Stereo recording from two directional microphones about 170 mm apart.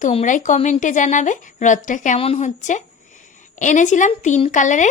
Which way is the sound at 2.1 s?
35° left (ahead or behind).